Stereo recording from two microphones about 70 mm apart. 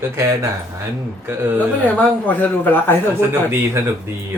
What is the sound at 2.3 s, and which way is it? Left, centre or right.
Speech, left.